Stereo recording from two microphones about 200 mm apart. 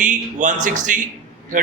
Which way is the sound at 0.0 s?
40° right (ahead or behind).